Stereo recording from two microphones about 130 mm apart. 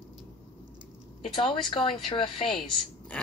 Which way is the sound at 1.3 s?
40° left (ahead or behind).